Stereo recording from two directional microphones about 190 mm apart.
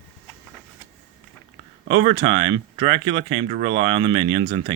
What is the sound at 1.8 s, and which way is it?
Speech, 30° right (ahead or behind).